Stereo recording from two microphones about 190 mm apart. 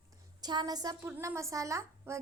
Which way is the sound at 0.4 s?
20° right (ahead or behind).